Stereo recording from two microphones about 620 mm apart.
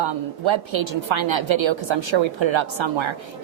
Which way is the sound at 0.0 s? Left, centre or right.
Right.